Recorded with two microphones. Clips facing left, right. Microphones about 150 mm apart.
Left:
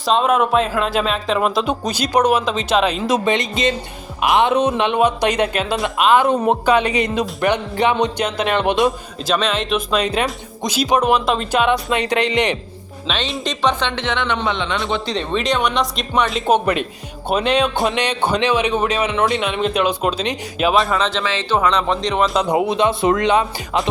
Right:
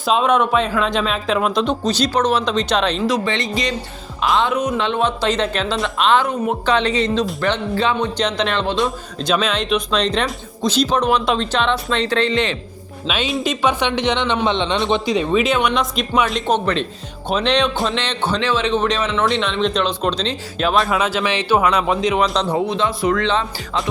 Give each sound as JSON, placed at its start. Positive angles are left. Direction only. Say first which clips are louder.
{"t": 0.0, "sound": "speech", "louder": "even", "side_deg": 0}
{"t": 3.1, "sound": "speech", "louder": "left 2 dB", "side_deg": 20}
{"t": 4.8, "sound": "speech", "louder": "left 3 dB", "side_deg": 15}
{"t": 9.2, "sound": "speech", "louder": "even", "side_deg": 0}
{"t": 13.1, "sound": "speech", "louder": "right 3 dB", "side_deg": -5}
{"t": 15.0, "sound": "speech", "louder": "right 4 dB", "side_deg": -10}
{"t": 16.5, "sound": "speech", "louder": "left 2 dB", "side_deg": 10}
{"t": 22.4, "sound": "speech", "louder": "left 3 dB", "side_deg": 15}